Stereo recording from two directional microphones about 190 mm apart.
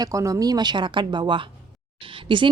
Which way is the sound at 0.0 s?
15° right (ahead or behind).